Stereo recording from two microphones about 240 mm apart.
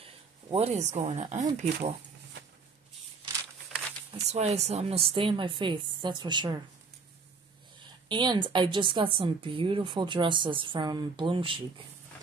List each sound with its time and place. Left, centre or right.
0.0 s speech: right
4.3 s speech: right
8.1 s speech: centre